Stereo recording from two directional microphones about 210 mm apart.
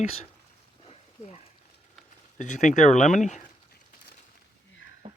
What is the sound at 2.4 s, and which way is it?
Speech, 35° left (ahead or behind).